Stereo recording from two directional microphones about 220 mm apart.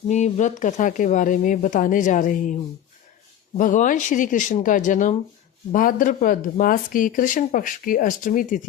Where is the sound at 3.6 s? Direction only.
35° left (ahead or behind).